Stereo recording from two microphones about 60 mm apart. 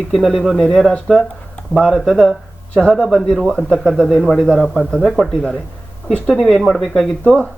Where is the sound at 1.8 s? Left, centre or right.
Centre.